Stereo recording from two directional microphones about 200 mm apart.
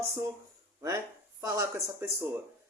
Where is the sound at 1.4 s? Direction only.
15° right (ahead or behind).